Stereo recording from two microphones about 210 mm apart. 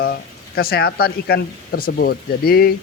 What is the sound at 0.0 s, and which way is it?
Speech, 45° left (ahead or behind).